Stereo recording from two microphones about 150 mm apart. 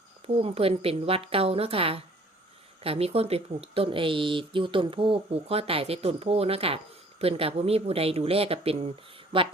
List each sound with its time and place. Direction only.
0.3 s speech: 40° right (ahead or behind)